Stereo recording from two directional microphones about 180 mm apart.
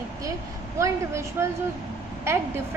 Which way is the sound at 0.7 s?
15° right (ahead or behind).